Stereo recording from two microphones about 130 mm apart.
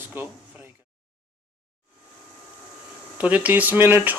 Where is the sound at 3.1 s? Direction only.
10° right (ahead or behind).